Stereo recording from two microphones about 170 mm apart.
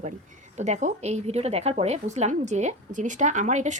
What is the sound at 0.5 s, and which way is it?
A woman's voice, 45° right (ahead or behind).